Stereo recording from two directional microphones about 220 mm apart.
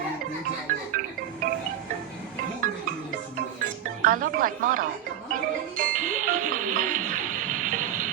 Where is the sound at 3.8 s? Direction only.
40° right (ahead or behind).